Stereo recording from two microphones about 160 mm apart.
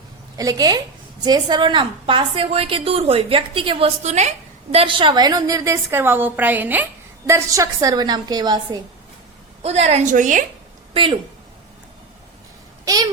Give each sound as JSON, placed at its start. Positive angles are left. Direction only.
{"t": 0.3, "sound": "a woman's voice", "side_deg": -25}
{"t": 4.7, "sound": "a woman's voice", "side_deg": -35}
{"t": 9.6, "sound": "a woman's voice", "side_deg": -40}
{"t": 10.9, "sound": "a woman's voice", "side_deg": -35}
{"t": 12.8, "sound": "babbling", "side_deg": -20}